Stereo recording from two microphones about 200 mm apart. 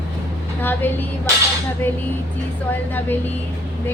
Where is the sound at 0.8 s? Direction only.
10° left (ahead or behind).